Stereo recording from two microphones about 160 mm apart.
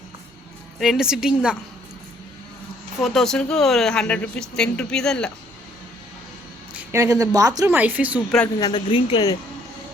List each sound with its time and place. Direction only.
0.8 s speech: 5° right (ahead or behind)
3.0 s speech: centre (ahead or behind)
6.9 s a woman's voice: 20° right (ahead or behind)
7.8 s speech: 10° right (ahead or behind)
8.5 s speech: 25° left (ahead or behind)